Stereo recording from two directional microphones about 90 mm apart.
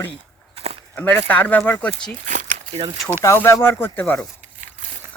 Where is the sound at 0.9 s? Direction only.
25° left (ahead or behind).